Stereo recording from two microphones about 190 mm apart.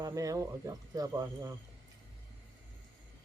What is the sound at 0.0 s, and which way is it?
Speech, 15° right (ahead or behind).